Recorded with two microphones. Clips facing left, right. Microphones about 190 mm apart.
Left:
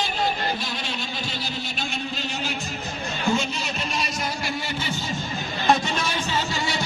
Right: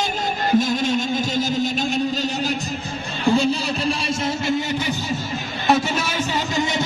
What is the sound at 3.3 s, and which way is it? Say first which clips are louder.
Music: right 7 dB; 35° right (ahead or behind).